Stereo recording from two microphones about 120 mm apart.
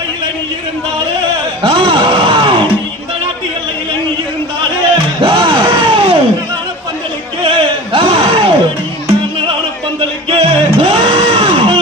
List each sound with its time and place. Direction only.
1.6 s music: 50° right (ahead or behind)
4.9 s music: 45° right (ahead or behind)
7.9 s a sound: 55° right (ahead or behind)
10.2 s music: 55° right (ahead or behind)